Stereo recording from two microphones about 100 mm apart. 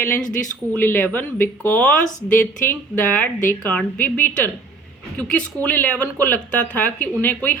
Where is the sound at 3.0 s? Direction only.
15° left (ahead or behind).